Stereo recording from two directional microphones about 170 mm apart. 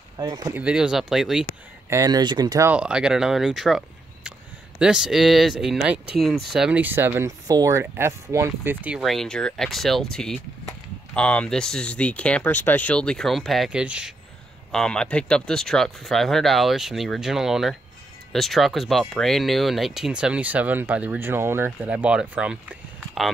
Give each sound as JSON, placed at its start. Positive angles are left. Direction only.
{"t": 0.2, "sound": "speech", "side_deg": -25}
{"t": 0.6, "sound": "speech", "side_deg": -5}
{"t": 1.9, "sound": "speech", "side_deg": -20}
{"t": 2.7, "sound": "speech", "side_deg": -5}
{"t": 14.7, "sound": "speech", "side_deg": 5}